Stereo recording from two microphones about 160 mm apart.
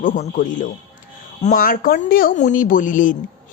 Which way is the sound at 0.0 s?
55° left (ahead or behind).